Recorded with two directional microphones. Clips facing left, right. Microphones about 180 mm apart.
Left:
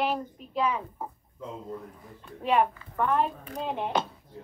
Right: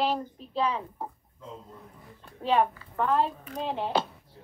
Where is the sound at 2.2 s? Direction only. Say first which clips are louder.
Even; 30° right (ahead or behind).